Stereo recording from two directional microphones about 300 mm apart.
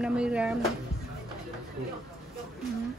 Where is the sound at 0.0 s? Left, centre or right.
Centre.